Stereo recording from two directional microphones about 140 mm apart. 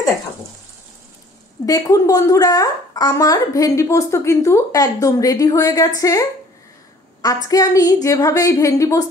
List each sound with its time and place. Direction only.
1.7 s a woman's voice: 25° left (ahead or behind)
7.4 s a woman's voice: 25° left (ahead or behind)